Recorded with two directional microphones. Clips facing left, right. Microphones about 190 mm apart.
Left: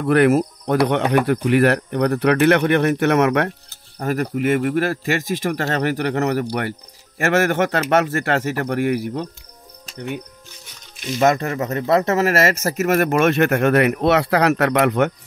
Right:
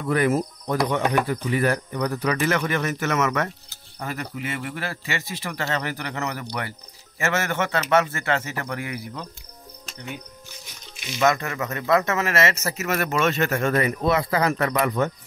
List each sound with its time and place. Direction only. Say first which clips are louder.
0.0 s speech: left 7 dB; 70° left (ahead or behind)
4.0 s speech: left 10 dB; 50° left (ahead or behind)
11.0 s speech: left 4 dB; 45° left (ahead or behind); by 15.1 s 70° left (ahead or behind)